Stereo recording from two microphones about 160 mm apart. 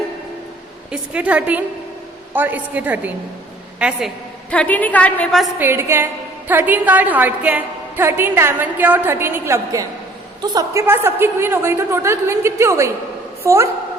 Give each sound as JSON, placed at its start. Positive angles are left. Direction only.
{"t": 0.9, "sound": "a woman's voice", "side_deg": -10}
{"t": 4.5, "sound": "a woman's voice", "side_deg": 10}
{"t": 5.5, "sound": "a woman's voice", "side_deg": -15}